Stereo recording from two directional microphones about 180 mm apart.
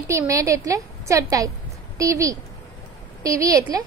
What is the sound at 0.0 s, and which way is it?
A woman's voice, 15° right (ahead or behind).